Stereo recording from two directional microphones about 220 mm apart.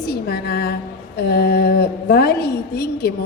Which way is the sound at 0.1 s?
45° left (ahead or behind).